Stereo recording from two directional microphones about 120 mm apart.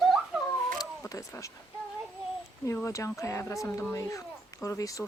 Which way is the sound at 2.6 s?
25° left (ahead or behind).